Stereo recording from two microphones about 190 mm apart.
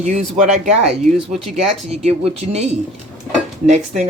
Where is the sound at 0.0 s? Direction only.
35° right (ahead or behind).